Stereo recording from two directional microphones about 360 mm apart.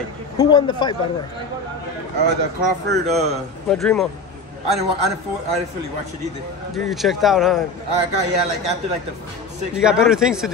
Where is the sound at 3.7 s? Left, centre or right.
Centre.